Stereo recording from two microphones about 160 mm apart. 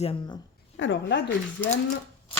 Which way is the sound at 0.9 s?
90° left.